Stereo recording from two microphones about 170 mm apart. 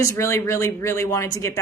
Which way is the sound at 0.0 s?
15° left (ahead or behind).